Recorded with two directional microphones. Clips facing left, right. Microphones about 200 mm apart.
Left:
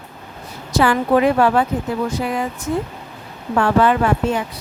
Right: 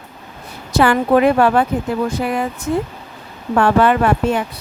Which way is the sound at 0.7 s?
60° right (ahead or behind).